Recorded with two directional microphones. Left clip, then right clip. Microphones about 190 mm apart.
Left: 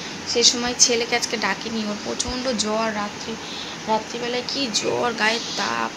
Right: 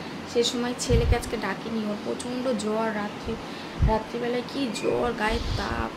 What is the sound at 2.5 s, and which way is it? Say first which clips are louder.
Speech: left 4 dB; 10° right (ahead or behind).